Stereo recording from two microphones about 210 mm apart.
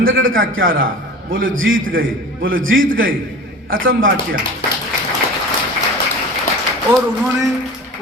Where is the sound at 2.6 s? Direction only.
70° right (ahead or behind).